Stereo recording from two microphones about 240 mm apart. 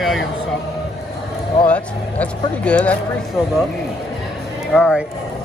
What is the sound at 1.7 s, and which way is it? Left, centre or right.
Speech, centre.